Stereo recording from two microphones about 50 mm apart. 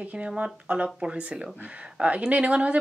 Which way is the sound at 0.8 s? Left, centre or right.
Centre.